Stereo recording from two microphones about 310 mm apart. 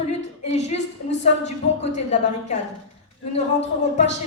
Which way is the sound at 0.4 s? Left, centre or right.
Left.